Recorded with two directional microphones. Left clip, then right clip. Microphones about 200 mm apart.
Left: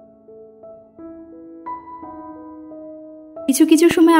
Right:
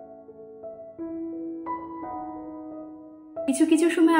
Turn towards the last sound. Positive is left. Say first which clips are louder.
# left 8 dB
turn(degrees=50)  # may be behind; listen again after turning